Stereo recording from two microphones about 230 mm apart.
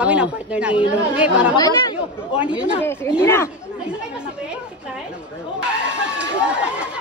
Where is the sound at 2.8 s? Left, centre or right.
Centre.